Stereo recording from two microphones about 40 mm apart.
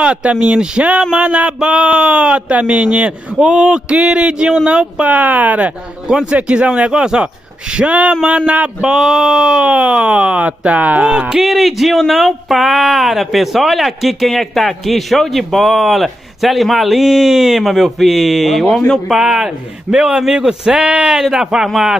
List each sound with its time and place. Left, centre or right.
0.0 s speech: right
1.1 s speech: right
2.2 s speech: right
5.0 s speech: right
6.3 s speech: right
6.9 s speech: centre
7.7 s speech: right
11.0 s speech: right
11.3 s speech: centre
19.9 s speech: right